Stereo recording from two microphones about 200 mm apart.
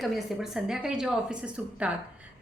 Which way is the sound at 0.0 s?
Centre (ahead or behind).